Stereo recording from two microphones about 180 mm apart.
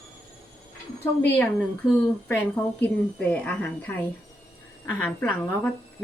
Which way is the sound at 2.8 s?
10° left (ahead or behind).